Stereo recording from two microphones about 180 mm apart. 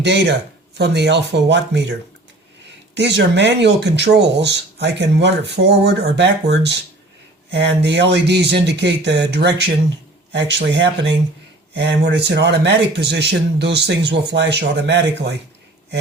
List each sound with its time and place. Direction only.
0.0 s speech: 75° right (ahead or behind)
2.9 s speech: 75° right (ahead or behind)